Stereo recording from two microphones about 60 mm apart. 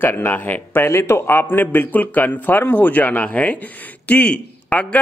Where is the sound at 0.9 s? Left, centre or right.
Left.